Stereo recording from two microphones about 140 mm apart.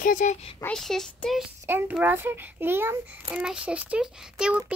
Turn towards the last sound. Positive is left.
turn(degrees=-5)  # may be behind; listen again after turning